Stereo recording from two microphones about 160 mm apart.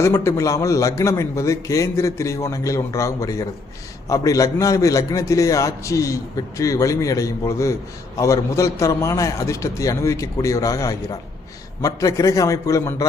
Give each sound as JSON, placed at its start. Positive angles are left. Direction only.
{"t": 0.0, "sound": "a man's voice", "side_deg": 20}